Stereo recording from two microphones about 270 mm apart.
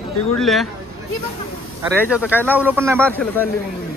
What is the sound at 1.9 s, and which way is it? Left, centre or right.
Speech, centre.